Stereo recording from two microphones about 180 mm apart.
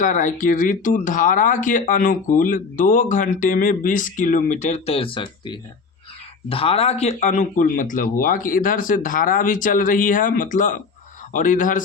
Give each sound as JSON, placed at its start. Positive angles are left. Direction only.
{"t": 0.0, "sound": "speech", "side_deg": 45}